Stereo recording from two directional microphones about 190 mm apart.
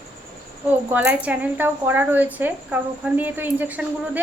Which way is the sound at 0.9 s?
10° right (ahead or behind).